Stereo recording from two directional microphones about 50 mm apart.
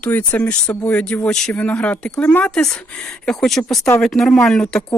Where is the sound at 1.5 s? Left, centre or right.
Left.